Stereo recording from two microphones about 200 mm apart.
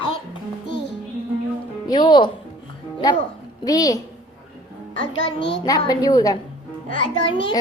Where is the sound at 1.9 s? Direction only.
20° left (ahead or behind).